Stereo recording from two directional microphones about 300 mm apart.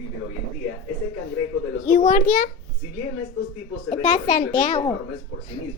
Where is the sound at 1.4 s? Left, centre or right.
Left.